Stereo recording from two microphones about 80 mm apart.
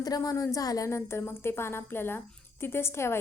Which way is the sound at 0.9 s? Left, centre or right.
Left.